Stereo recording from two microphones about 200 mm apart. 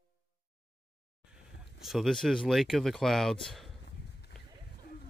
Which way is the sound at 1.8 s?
Centre (ahead or behind).